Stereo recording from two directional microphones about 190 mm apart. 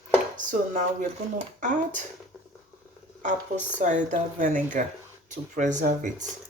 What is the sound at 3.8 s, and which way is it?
Speech, 40° right (ahead or behind).